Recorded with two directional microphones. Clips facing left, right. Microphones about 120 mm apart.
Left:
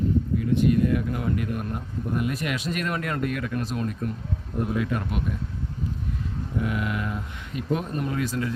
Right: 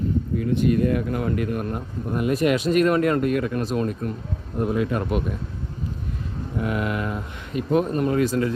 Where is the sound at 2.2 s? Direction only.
30° right (ahead or behind).